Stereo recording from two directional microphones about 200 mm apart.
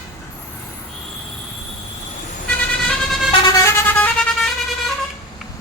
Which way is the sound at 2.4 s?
5° left (ahead or behind).